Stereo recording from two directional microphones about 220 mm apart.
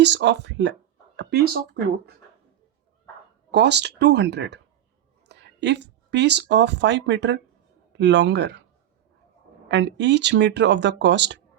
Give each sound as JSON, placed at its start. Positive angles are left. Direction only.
{"t": 0.0, "sound": "speech", "side_deg": -50}
{"t": 3.5, "sound": "speech", "side_deg": -50}
{"t": 9.6, "sound": "speech", "side_deg": -55}